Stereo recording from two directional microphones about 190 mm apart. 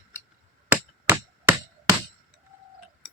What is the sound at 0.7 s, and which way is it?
Chop, 10° right (ahead or behind).